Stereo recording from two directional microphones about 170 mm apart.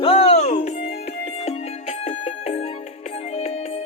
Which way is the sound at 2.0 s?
40° left (ahead or behind).